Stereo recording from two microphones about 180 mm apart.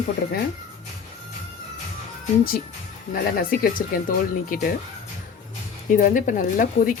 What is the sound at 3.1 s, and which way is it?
Speech, 55° left (ahead or behind).